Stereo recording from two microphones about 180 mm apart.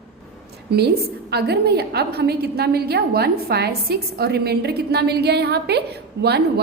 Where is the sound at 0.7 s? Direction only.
65° right (ahead or behind).